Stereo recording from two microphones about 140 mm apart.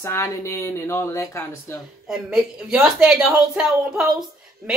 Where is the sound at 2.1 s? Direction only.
5° right (ahead or behind).